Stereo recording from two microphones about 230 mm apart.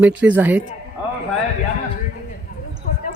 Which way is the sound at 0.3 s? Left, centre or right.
Centre.